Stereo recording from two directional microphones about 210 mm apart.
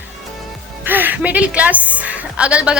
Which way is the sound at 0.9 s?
10° right (ahead or behind).